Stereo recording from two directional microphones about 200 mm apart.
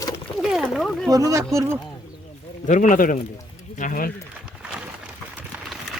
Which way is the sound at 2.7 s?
40° left (ahead or behind).